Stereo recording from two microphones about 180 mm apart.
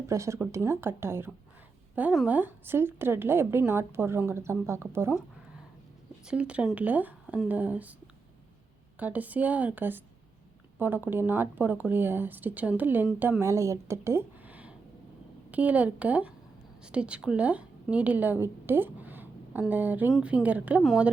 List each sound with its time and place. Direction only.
0.1 s speech: 15° right (ahead or behind)
6.2 s a woman's voice: 5° right (ahead or behind)